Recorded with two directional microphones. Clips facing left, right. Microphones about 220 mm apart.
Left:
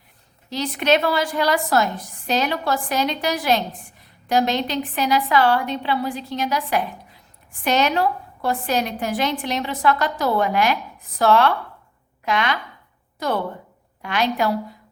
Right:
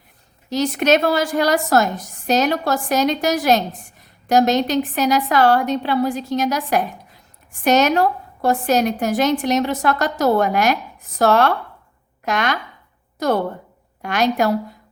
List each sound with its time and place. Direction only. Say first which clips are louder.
0.5 s a woman's voice: right 3 dB; 45° right (ahead or behind)